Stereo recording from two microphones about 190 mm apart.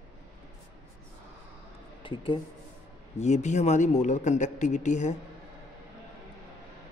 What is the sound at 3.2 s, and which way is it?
Speech, 35° left (ahead or behind).